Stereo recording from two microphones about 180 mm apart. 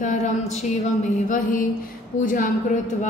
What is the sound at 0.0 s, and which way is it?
Speech, 40° left (ahead or behind).